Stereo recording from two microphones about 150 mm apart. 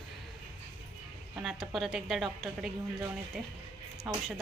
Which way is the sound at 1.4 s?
Centre (ahead or behind).